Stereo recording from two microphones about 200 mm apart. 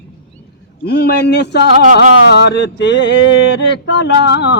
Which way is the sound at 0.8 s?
55° left (ahead or behind).